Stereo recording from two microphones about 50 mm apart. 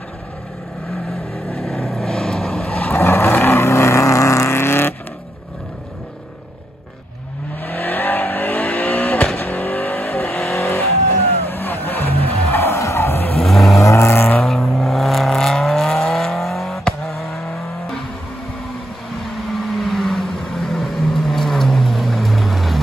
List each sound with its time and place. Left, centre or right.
1.5 s vehicle: centre
2.9 s vehicle: left
4.6 s vehicle: left
7.6 s vehicle: left
8.5 s vehicle: left
9.4 s vehicle: left
10.5 s vehicle: left
12.4 s music: left
13.4 s vehicle: centre
13.7 s vehicle: left
14.1 s vehicle: left
14.4 s vehicle: centre
19.8 s vehicle: centre